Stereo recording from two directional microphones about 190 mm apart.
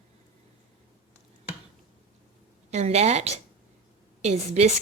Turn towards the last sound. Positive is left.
turn(degrees=-35)  # may be behind; listen again after turning